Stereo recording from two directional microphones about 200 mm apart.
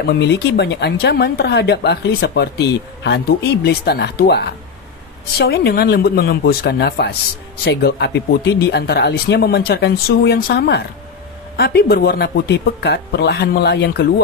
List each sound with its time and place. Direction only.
0.1 s a woman's voice: 55° left (ahead or behind)